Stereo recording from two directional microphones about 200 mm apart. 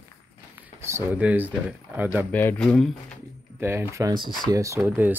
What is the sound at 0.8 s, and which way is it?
Speech, 10° right (ahead or behind).